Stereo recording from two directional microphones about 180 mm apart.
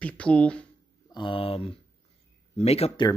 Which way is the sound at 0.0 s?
5° left (ahead or behind).